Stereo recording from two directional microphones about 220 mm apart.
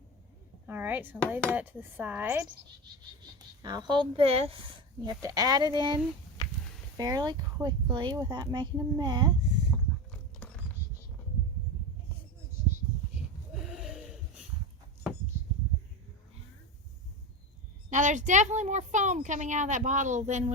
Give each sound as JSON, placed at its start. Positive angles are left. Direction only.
{"t": 0.7, "sound": "speech", "side_deg": -10}
{"t": 1.3, "sound": "dishes", "side_deg": -10}
{"t": 3.3, "sound": "speech", "side_deg": -20}
{"t": 10.1, "sound": "horse", "side_deg": 5}
{"t": 13.7, "sound": "a sound", "side_deg": 0}
{"t": 17.9, "sound": "speech", "side_deg": -35}